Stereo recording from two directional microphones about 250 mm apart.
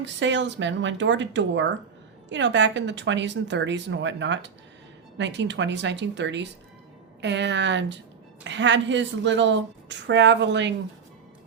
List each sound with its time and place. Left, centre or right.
0.0 s a woman's voice: right